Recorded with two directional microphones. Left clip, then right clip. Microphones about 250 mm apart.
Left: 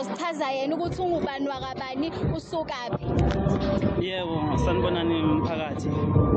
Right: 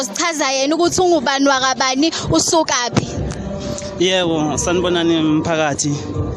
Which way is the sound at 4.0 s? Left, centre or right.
Right.